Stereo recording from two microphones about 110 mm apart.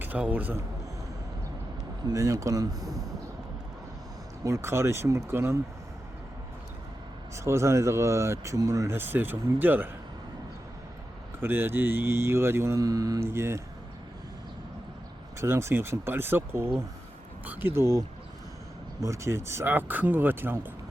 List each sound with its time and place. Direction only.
0.0 s a man's voice: 15° right (ahead or behind)
2.0 s speech: 30° right (ahead or behind)
4.4 s speech: 25° right (ahead or behind)
7.3 s speech: 25° right (ahead or behind)
11.3 s speech: 20° right (ahead or behind)
15.4 s speech: 25° right (ahead or behind)
19.0 s speech: 25° right (ahead or behind)